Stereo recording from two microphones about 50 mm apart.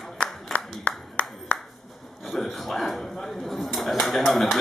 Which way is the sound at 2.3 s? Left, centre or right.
Centre.